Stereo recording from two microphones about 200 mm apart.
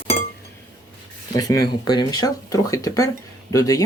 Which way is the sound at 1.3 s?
20° left (ahead or behind).